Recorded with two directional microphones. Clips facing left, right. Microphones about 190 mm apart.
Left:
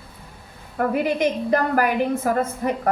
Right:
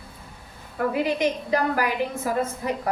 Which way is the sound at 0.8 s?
50° left (ahead or behind).